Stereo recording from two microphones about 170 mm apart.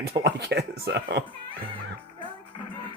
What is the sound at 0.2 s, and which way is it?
Speech, 90° right.